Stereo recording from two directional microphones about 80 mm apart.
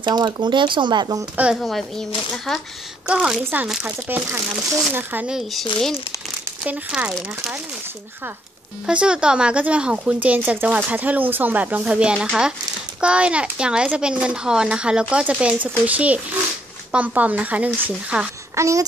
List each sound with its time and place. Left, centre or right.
0.0 s speech: right
1.5 s a child's voice: centre
3.1 s a child's voice: centre
4.1 s speech: right
5.3 s a child's voice: centre
6.6 s a child's voice: centre
8.8 s a child's voice: centre
18.5 s speech: right